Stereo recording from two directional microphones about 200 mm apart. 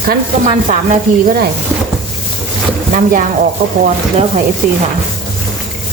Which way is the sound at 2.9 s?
40° right (ahead or behind).